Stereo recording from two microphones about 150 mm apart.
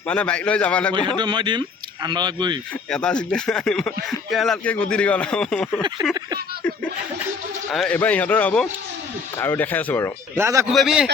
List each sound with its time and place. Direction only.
0.1 s a man's voice: 5° left (ahead or behind)
1.2 s speech: 30° right (ahead or behind)
2.9 s speech: 5° left (ahead or behind)
7.7 s a man's voice: centre (ahead or behind)
10.3 s a man's voice: 20° right (ahead or behind)
10.7 s speech: centre (ahead or behind)